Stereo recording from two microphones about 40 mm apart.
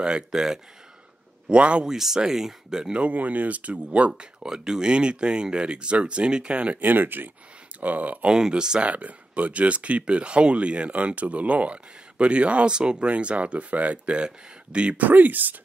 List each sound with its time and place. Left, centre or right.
0.3 s speech: centre
1.5 s speech: right
1.9 s speech: centre
2.9 s speech: right
4.5 s speech: centre
6.8 s speech: right
7.8 s speech: right
8.3 s speech: centre
8.8 s speech: right
13.1 s speech: right
14.1 s speech: right
15.0 s speech: right